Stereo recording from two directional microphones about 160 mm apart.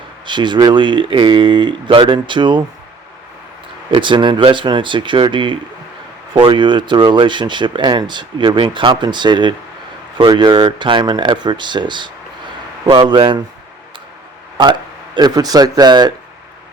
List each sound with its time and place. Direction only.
0.3 s speech: 30° right (ahead or behind)
3.9 s speech: 30° right (ahead or behind)
14.6 s speech: 30° right (ahead or behind)